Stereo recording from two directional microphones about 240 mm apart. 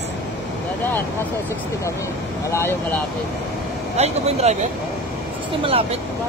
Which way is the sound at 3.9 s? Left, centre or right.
Right.